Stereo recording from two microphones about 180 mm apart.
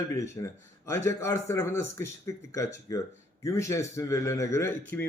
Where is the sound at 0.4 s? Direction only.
20° left (ahead or behind).